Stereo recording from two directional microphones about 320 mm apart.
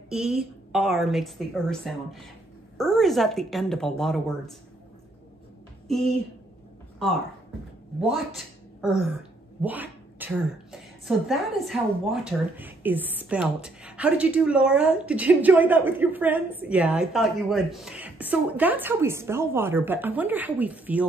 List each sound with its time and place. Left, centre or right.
0.1 s speech: centre
5.9 s speech: centre